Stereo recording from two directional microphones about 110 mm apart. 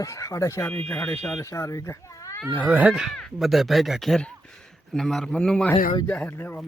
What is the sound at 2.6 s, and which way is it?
Speech, 5° right (ahead or behind).